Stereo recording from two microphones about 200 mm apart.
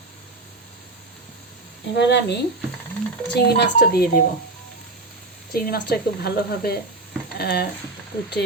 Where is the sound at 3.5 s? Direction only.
55° left (ahead or behind).